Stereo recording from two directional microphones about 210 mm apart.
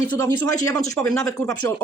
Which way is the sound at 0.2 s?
15° left (ahead or behind).